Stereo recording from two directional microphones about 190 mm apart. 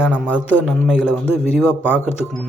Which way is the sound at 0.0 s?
5° right (ahead or behind).